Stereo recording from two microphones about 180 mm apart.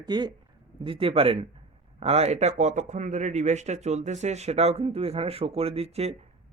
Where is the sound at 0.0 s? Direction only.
25° right (ahead or behind).